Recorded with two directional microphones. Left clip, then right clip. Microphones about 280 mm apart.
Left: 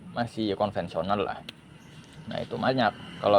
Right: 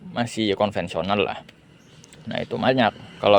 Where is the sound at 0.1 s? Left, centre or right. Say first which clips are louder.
Right 6 dB; right.